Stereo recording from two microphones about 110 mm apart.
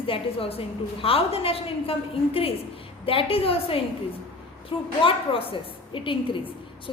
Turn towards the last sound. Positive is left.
turn(degrees=50)  # may be behind; listen again after turning